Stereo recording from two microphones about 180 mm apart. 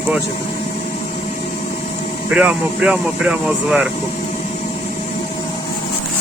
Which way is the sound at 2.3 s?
5° right (ahead or behind).